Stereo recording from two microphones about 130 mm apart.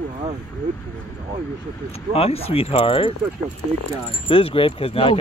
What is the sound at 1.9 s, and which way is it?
Speech, 50° left (ahead or behind).